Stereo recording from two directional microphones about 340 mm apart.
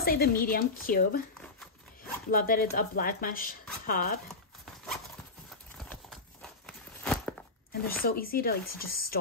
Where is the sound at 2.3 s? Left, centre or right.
Left.